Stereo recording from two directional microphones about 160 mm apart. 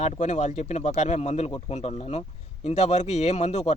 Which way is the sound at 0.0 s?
45° left (ahead or behind).